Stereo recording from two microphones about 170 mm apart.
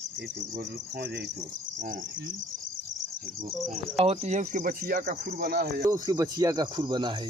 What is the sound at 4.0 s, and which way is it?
Speech, 40° right (ahead or behind).